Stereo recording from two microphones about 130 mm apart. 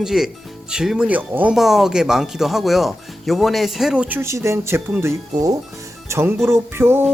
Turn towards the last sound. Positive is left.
turn(degrees=-20)  # may be behind; listen again after turning